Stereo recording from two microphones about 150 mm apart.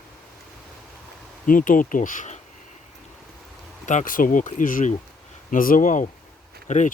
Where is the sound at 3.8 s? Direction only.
60° left (ahead or behind).